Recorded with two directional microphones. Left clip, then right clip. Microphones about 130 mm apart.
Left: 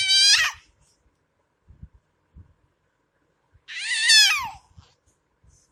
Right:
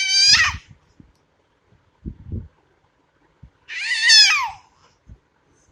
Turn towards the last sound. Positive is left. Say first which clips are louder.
# right 4 dB
turn(degrees=20)  # may be behind; listen again after turning